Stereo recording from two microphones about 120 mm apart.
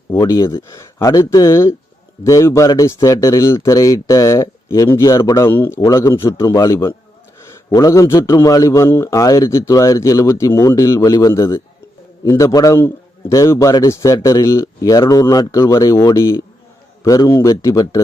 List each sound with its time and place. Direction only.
0.2 s a man's voice: 30° left (ahead or behind)